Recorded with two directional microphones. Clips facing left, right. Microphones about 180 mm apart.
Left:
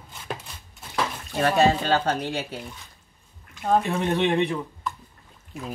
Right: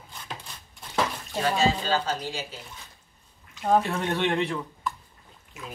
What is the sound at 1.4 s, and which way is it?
Speech, 60° left (ahead or behind).